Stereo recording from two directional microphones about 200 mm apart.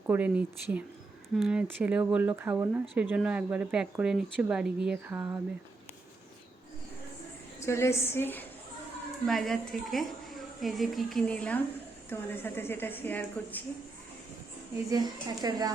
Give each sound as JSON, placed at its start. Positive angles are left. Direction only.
{"t": 0.1, "sound": "speech", "side_deg": -5}
{"t": 7.6, "sound": "a woman's voice", "side_deg": 15}
{"t": 14.8, "sound": "speech", "side_deg": -20}